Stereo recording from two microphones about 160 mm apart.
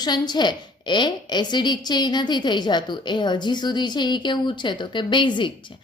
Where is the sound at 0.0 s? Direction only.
25° left (ahead or behind).